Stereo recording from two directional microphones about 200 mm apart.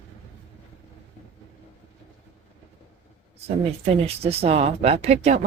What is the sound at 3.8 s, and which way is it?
Speech, 30° right (ahead or behind).